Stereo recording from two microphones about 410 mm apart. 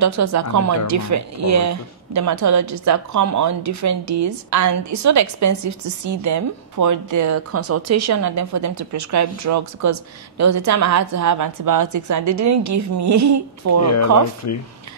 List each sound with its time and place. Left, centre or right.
0.0 s speech: right
13.8 s speech: left